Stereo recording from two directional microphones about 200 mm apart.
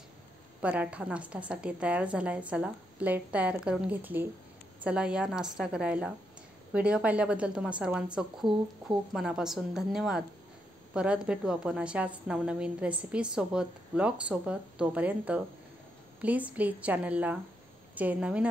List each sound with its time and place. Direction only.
0.6 s a woman's voice: 5° right (ahead or behind)